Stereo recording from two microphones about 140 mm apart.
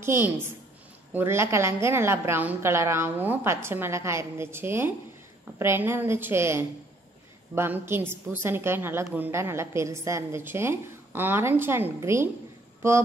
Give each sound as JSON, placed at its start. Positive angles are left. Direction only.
{"t": 0.0, "sound": "a woman's voice", "side_deg": -15}